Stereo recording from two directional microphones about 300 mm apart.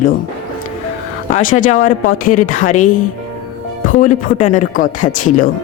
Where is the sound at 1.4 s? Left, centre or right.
Left.